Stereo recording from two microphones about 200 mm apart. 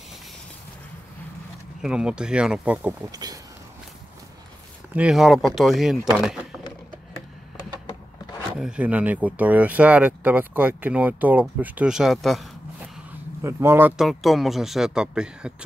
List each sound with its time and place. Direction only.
1.8 s speech: 5° right (ahead or behind)
3.1 s speech: 20° right (ahead or behind)
4.9 s speech: 5° right (ahead or behind)
8.5 s speech: 5° right (ahead or behind)
13.4 s speech: 15° right (ahead or behind)